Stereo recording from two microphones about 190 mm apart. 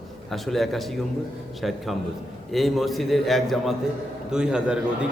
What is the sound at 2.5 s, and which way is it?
A man's voice, centre (ahead or behind).